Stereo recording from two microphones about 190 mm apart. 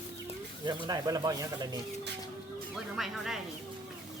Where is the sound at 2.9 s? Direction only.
Centre (ahead or behind).